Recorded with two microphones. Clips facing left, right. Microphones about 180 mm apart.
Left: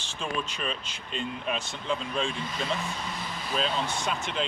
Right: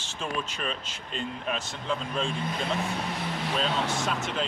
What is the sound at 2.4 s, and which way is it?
Speech, 65° right (ahead or behind).